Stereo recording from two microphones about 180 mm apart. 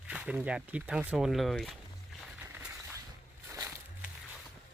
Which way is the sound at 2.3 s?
10° right (ahead or behind).